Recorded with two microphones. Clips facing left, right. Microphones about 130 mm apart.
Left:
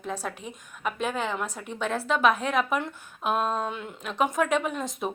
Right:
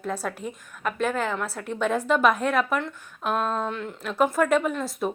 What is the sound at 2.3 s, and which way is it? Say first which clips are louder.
A woman's voice: right 2 dB; 10° left (ahead or behind).